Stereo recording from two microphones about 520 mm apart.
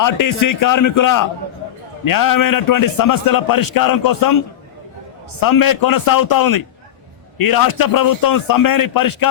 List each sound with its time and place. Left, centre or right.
0.0 s a man's voice: left
5.4 s a man's voice: left